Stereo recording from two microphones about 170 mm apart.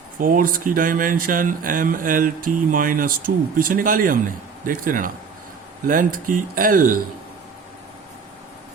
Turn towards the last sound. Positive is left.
turn(degrees=-55)  # may be behind; listen again after turning